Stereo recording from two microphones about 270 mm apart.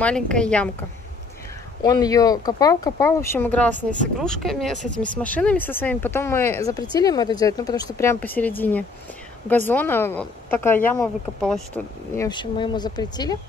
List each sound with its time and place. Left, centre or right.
0.0 s a woman's voice: centre
1.8 s a woman's voice: centre
12.3 s speech: centre